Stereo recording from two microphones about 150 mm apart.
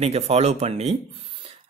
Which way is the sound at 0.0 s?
45° right (ahead or behind).